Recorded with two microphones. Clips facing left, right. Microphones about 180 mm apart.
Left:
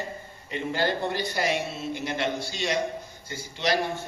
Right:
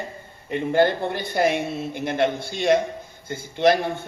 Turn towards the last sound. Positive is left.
turn(degrees=-55)  # may be behind; listen again after turning